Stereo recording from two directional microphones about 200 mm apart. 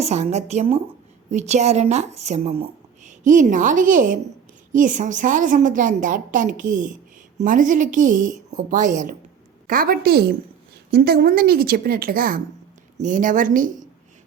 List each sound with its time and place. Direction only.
0.0 s a woman's voice: 35° right (ahead or behind)